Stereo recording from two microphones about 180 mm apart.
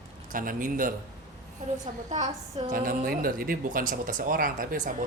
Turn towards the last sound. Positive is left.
turn(degrees=-50)  # may be behind; listen again after turning